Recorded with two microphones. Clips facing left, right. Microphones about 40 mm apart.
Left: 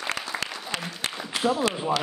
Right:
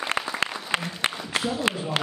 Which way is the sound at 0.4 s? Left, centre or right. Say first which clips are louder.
Right 5 dB; right.